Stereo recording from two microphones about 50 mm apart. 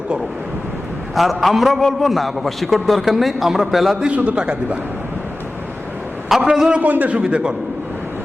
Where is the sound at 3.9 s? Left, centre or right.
Right.